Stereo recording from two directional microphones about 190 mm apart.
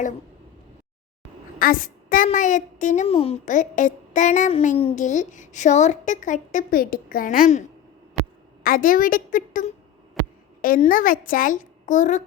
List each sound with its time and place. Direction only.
1.5 s a child's voice: 50° left (ahead or behind)
8.6 s a child's voice: 45° left (ahead or behind)
10.8 s a child's voice: 45° left (ahead or behind)